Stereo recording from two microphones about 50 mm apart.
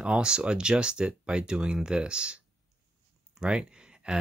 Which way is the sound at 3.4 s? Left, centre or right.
Centre.